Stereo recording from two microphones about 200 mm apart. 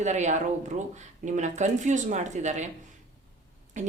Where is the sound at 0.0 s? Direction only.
35° right (ahead or behind).